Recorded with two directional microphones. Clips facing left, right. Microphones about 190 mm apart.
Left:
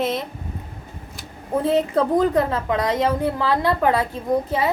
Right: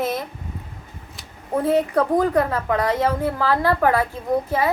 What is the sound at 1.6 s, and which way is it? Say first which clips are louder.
A woman's voice: even; 25° left (ahead or behind).